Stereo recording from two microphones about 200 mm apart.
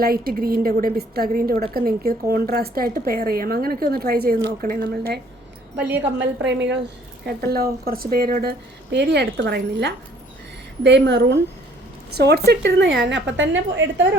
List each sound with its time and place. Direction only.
0.0 s speech: 50° right (ahead or behind)
6.1 s speech: 60° right (ahead or behind)
7.3 s a woman's voice: 50° right (ahead or behind); by 14.1 s 70° right (ahead or behind)